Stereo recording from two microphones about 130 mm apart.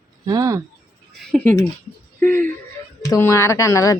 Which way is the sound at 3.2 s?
20° left (ahead or behind).